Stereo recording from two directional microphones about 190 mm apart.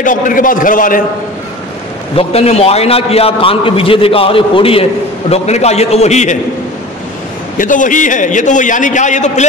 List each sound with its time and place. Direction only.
0.0 s a man's voice: 45° left (ahead or behind)
2.1 s a man's voice: 30° left (ahead or behind)
7.5 s a man's voice: 45° left (ahead or behind)